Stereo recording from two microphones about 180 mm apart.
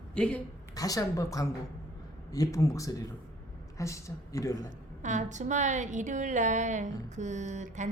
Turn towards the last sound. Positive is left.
turn(degrees=-40)  # may be behind; listen again after turning